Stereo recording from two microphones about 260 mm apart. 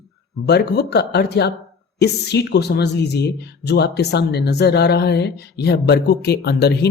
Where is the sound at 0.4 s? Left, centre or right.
Left.